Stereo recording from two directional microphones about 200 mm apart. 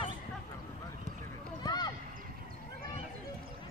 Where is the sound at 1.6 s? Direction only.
20° left (ahead or behind).